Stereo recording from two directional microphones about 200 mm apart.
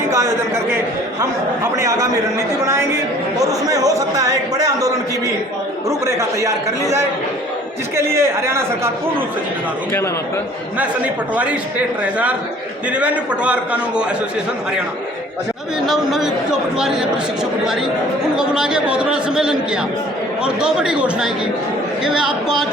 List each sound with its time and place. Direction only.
0.1 s a man's voice: 15° right (ahead or behind)
1.7 s speech: 15° right (ahead or behind)
10.8 s a man's voice: 5° right (ahead or behind)
15.9 s a man's voice: centre (ahead or behind)
18.3 s a man's voice: 5° right (ahead or behind)